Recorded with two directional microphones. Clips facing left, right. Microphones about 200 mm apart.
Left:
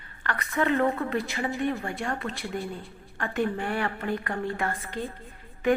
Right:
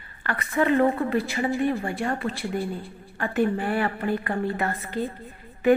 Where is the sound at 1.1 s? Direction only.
Centre (ahead or behind).